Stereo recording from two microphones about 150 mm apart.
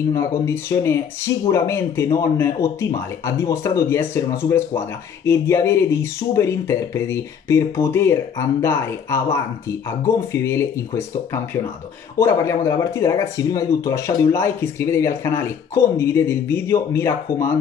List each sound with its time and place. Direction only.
0.5 s speech: 15° left (ahead or behind)